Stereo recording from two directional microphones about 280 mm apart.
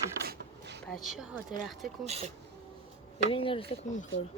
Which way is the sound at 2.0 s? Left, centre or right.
Right.